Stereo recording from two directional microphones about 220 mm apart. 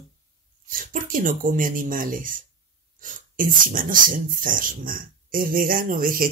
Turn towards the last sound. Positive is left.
turn(degrees=-40)  # may be behind; listen again after turning